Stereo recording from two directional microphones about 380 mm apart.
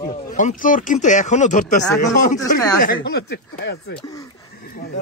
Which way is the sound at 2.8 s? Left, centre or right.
Left.